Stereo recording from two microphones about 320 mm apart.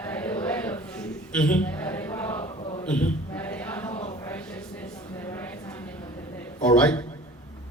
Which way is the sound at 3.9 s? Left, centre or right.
Centre.